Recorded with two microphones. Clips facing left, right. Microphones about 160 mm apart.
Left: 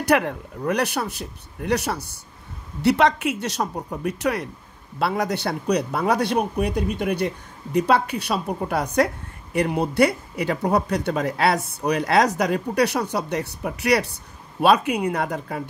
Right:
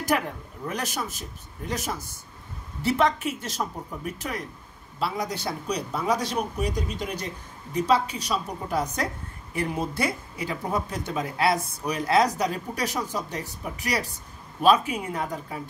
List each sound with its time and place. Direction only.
0.0 s speech: 70° left (ahead or behind)